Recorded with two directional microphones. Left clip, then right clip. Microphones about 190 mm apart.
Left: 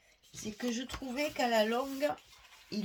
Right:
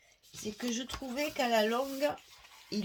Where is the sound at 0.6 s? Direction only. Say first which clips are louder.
Even; 35° right (ahead or behind).